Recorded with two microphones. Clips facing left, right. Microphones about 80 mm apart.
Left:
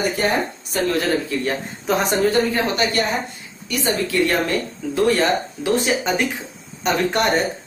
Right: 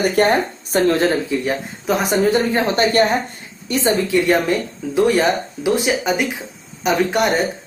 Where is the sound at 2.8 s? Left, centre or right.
Right.